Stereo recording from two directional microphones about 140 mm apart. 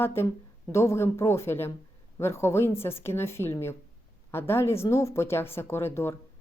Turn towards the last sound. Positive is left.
turn(degrees=15)  # may be behind; listen again after turning